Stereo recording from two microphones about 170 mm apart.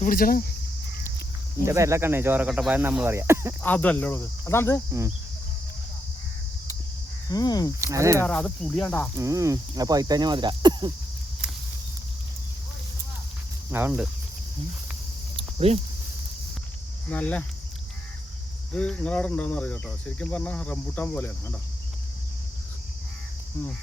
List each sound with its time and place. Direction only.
0.0 s speech: 55° left (ahead or behind)
1.6 s speech: 15° right (ahead or behind)
3.6 s cricket: 10° left (ahead or behind)
4.9 s speech: 20° right (ahead or behind)
7.3 s speech: 25° left (ahead or behind)
7.8 s speech: 15° right (ahead or behind)
8.2 s speech: 5° left (ahead or behind)
9.1 s speech: 20° right (ahead or behind)
13.7 s speech: 10° right (ahead or behind)
15.4 s cricket: 40° right (ahead or behind)
17.1 s cricket: 10° left (ahead or behind)
18.7 s cricket: 5° left (ahead or behind)